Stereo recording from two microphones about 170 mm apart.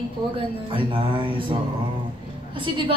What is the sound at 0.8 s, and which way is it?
Speech, 30° right (ahead or behind).